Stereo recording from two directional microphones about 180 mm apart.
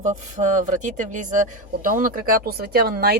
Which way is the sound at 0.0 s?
40° right (ahead or behind).